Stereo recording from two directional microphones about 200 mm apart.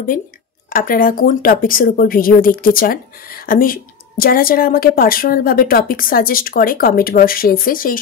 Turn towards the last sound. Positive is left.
turn(degrees=45)  # may be behind; listen again after turning